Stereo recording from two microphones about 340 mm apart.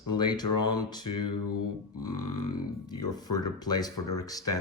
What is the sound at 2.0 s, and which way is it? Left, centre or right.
Grunt, left.